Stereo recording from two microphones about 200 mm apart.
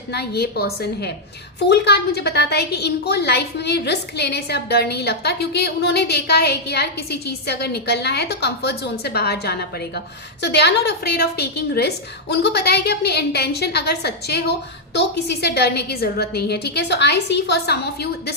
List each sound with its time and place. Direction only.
0.1 s a woman's voice: 55° left (ahead or behind)